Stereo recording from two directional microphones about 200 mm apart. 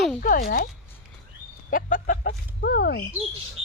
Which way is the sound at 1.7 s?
45° left (ahead or behind).